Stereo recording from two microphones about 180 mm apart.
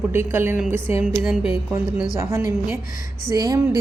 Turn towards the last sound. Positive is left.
turn(degrees=-20)  # may be behind; listen again after turning